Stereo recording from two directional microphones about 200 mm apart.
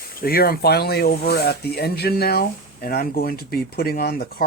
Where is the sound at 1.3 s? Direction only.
50° left (ahead or behind).